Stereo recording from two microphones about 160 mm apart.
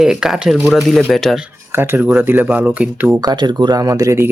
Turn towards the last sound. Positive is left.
turn(degrees=-20)  # may be behind; listen again after turning